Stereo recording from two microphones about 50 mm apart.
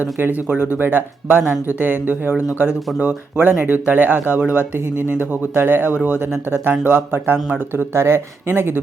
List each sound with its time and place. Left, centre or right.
0.0 s speech: right
7.9 s speech: right